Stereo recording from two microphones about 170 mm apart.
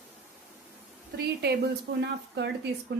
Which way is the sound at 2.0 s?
85° right.